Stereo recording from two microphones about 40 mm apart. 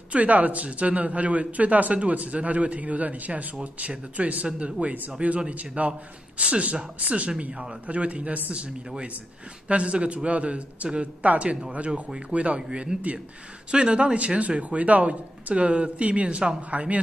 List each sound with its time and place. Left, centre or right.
0.1 s speech: right